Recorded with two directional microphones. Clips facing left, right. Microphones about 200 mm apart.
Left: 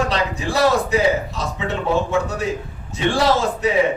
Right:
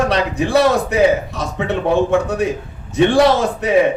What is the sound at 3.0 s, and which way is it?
Speech, 60° right (ahead or behind).